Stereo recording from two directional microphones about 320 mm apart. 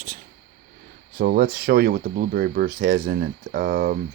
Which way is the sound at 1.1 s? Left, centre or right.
Right.